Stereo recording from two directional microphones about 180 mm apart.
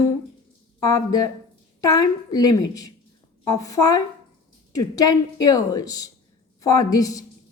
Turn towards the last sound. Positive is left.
turn(degrees=20)  # may be behind; listen again after turning